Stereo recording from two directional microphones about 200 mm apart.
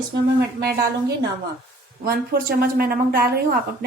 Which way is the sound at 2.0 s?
50° right (ahead or behind).